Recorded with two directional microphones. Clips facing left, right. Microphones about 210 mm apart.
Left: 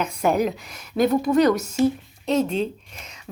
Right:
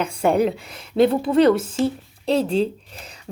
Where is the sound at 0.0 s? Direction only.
30° right (ahead or behind).